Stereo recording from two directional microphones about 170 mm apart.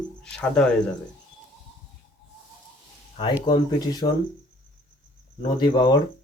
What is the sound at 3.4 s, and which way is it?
Speech, 25° left (ahead or behind).